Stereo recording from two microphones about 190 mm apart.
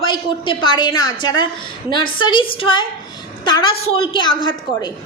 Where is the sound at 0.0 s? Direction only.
25° left (ahead or behind).